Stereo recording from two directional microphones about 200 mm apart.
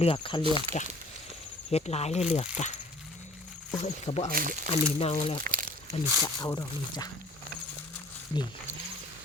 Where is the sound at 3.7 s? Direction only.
35° left (ahead or behind).